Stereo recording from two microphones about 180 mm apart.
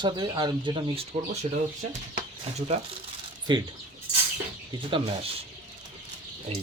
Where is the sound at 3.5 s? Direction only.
25° right (ahead or behind).